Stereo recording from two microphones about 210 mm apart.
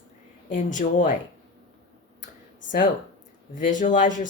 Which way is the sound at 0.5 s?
40° left (ahead or behind).